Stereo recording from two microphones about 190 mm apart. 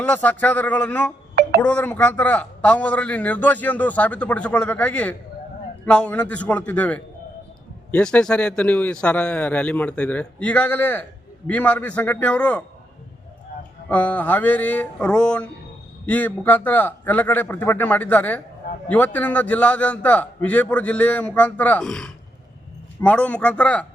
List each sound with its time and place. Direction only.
0.0 s a man's voice: 10° left (ahead or behind)
1.4 s a sound: 55° right (ahead or behind)
1.6 s a man's voice: 10° left (ahead or behind)
13.8 s a man's voice: 5° left (ahead or behind)